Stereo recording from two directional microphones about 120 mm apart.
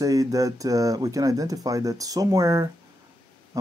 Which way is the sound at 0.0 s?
30° right (ahead or behind).